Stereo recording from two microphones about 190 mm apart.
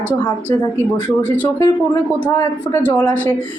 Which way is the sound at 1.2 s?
5° left (ahead or behind).